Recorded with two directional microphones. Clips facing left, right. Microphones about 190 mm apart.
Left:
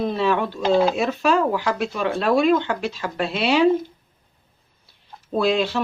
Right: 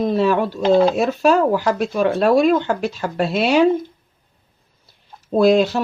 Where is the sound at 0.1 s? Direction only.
45° right (ahead or behind).